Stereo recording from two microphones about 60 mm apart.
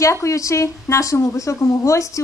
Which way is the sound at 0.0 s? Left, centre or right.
Left.